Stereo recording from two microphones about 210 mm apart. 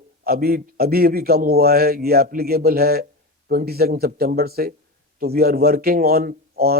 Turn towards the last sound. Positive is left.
turn(degrees=-45)  # may be behind; listen again after turning